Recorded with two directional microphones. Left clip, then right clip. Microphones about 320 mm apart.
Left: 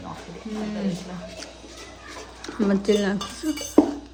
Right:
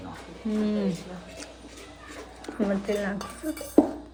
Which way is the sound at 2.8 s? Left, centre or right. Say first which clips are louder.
Left 7 dB; centre.